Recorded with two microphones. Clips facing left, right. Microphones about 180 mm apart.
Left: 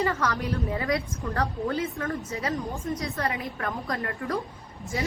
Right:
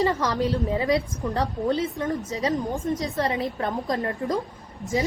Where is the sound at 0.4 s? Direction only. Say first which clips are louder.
Right 5 dB; 20° right (ahead or behind).